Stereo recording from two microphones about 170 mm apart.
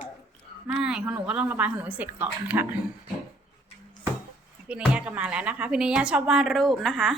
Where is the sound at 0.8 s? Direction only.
5° right (ahead or behind).